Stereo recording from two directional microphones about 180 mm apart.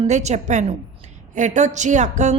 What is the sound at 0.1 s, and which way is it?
A woman's voice, 40° right (ahead or behind).